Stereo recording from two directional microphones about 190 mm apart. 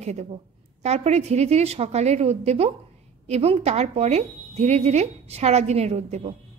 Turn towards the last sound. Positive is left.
turn(degrees=-35)  # may be behind; listen again after turning